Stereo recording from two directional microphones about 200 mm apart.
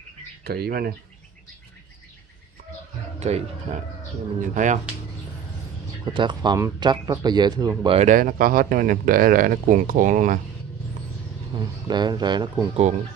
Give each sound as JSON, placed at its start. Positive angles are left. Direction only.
{"t": 0.4, "sound": "speech", "side_deg": -50}
{"t": 3.2, "sound": "speech", "side_deg": -35}
{"t": 6.0, "sound": "speech", "side_deg": -20}
{"t": 8.1, "sound": "speech", "side_deg": -45}
{"t": 11.5, "sound": "speech", "side_deg": -20}